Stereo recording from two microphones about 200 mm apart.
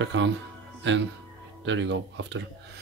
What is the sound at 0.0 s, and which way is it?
Speech, 65° right (ahead or behind).